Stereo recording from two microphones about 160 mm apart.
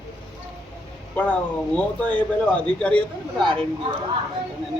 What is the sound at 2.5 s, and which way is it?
A man's voice, 5° left (ahead or behind).